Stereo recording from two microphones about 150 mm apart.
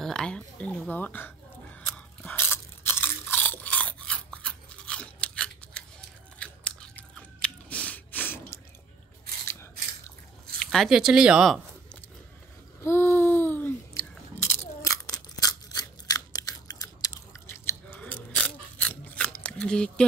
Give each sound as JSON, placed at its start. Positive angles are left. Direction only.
{"t": 0.0, "sound": "crow", "side_deg": 5}
{"t": 7.4, "sound": "drip", "side_deg": 10}
{"t": 9.5, "sound": "biting", "side_deg": 15}
{"t": 10.6, "sound": "speech", "side_deg": 0}
{"t": 12.8, "sound": "a sound", "side_deg": 15}
{"t": 14.5, "sound": "scissors", "side_deg": 20}